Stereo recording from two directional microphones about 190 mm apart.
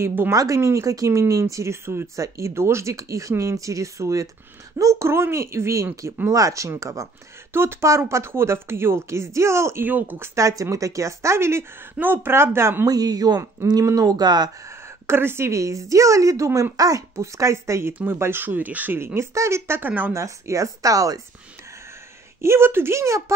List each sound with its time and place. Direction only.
0.0 s speech: 10° right (ahead or behind)
22.4 s speech: 15° right (ahead or behind)